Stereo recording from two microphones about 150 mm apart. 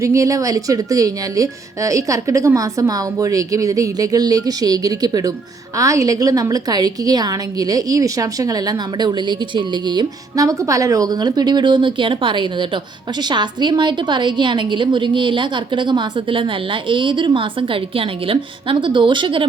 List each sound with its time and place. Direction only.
0.0 s a woman's voice: 20° right (ahead or behind)